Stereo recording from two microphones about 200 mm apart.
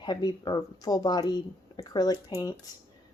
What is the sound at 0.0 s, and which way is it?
Speech, 20° left (ahead or behind).